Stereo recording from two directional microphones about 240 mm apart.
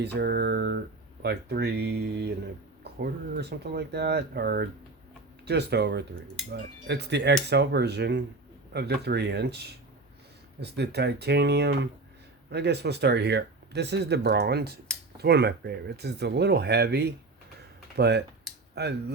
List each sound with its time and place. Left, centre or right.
0.0 s speech: right